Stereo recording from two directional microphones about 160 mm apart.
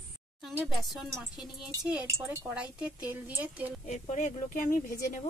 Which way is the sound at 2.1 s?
15° right (ahead or behind).